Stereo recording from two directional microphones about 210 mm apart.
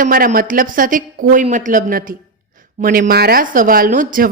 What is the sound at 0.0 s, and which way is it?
Speech, 40° right (ahead or behind).